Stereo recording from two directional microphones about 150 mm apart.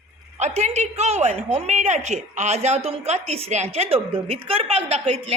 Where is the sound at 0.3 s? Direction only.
50° right (ahead or behind).